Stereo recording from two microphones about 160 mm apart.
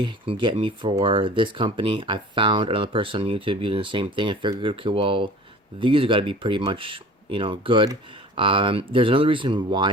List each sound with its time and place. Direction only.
0.0 s speech: 30° right (ahead or behind)